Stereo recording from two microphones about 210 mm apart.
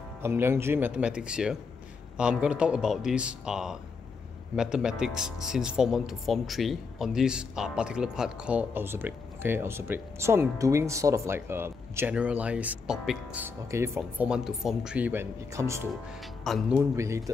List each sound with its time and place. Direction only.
0.2 s speech: 10° right (ahead or behind)
16.4 s speech: centre (ahead or behind)
16.9 s speech: 15° right (ahead or behind)